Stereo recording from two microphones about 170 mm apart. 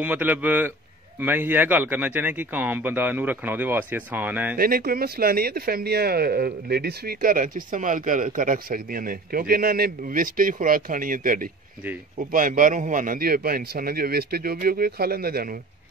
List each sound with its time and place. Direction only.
0.0 s speech: 10° right (ahead or behind)
4.6 s speech: 60° right (ahead or behind)